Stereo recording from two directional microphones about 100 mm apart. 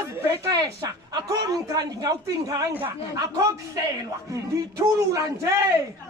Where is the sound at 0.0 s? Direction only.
30° right (ahead or behind).